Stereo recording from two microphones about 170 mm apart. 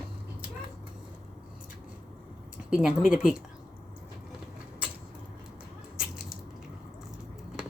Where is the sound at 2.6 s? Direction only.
5° right (ahead or behind).